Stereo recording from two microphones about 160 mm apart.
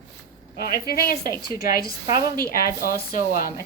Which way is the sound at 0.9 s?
70° left (ahead or behind).